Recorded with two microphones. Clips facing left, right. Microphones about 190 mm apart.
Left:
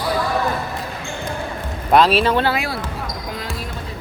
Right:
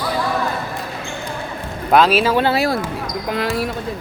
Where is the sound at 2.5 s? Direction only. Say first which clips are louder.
Right 5 dB; 40° right (ahead or behind).